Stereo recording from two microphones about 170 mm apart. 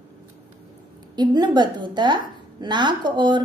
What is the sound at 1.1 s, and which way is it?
A woman's voice, 25° right (ahead or behind).